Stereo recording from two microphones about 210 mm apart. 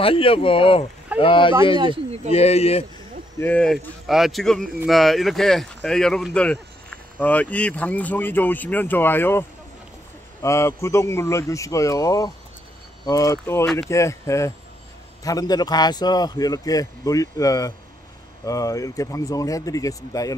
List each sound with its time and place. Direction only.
0.0 s speech: 25° left (ahead or behind)
3.3 s speech: 10° left (ahead or behind)